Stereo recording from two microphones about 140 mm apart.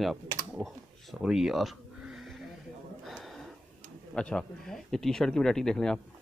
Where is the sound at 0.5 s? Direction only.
Centre (ahead or behind).